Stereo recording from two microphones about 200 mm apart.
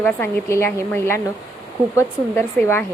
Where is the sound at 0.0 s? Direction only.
10° left (ahead or behind).